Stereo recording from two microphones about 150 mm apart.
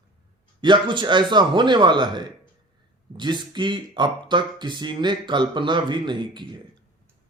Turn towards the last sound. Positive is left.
turn(degrees=-30)  # may be behind; listen again after turning